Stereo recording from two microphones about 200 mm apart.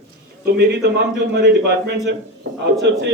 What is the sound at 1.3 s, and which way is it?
Speech, 55° right (ahead or behind).